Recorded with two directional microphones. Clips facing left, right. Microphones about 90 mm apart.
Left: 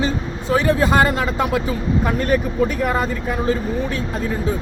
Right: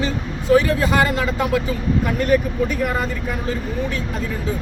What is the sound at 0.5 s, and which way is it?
Speech, 30° left (ahead or behind).